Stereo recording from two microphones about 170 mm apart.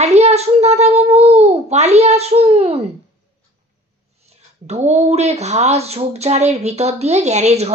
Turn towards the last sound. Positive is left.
turn(degrees=-40)  # may be behind; listen again after turning